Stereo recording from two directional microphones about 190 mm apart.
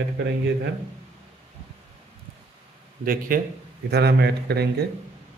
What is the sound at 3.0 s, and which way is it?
Speech, 50° right (ahead or behind).